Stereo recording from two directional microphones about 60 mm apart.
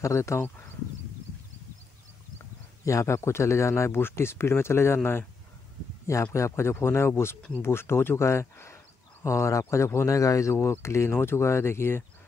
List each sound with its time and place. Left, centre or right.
0.0 s speech: left
2.8 s speech: left
6.3 s speech: left
10.5 s speech: left